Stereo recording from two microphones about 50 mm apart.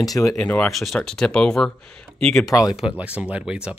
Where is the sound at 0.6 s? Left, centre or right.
Centre.